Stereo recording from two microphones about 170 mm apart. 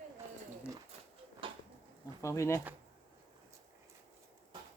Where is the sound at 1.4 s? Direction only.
30° right (ahead or behind).